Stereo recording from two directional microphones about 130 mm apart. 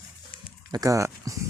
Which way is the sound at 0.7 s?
25° right (ahead or behind).